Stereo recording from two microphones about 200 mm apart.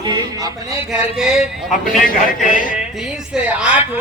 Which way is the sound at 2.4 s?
40° left (ahead or behind).